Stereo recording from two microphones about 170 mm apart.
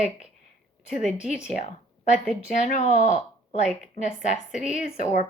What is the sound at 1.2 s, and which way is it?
Speech, 5° right (ahead or behind).